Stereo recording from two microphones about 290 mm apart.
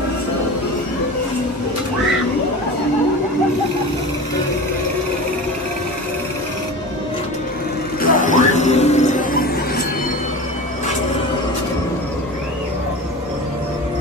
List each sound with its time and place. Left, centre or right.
8.0 s music: left